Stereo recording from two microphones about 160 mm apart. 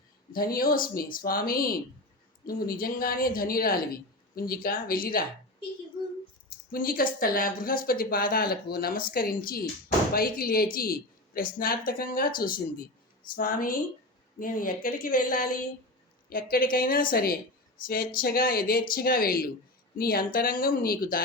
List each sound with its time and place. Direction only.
0.3 s speech: 65° left (ahead or behind)
6.7 s speech: 65° left (ahead or behind)